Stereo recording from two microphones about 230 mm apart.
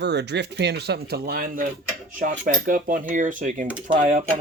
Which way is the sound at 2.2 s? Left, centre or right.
Right.